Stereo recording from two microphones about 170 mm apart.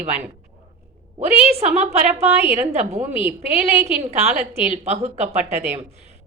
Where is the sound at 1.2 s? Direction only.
40° right (ahead or behind).